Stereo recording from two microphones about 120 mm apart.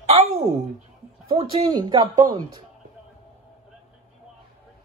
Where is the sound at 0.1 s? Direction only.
60° right (ahead or behind).